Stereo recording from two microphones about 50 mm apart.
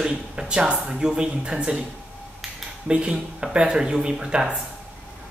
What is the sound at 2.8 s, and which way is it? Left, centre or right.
Speech, centre.